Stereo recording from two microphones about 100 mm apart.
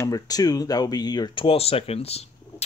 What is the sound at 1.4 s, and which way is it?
Speech, 75° left (ahead or behind).